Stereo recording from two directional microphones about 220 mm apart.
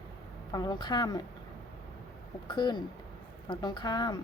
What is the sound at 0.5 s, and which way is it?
Speech, 20° left (ahead or behind).